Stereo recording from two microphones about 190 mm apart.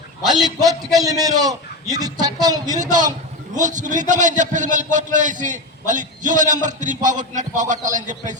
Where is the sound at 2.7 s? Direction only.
40° right (ahead or behind).